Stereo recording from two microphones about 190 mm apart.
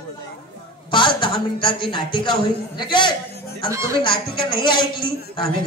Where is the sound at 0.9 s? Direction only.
25° left (ahead or behind).